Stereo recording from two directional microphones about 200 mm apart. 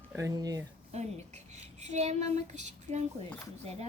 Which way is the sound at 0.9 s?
35° right (ahead or behind).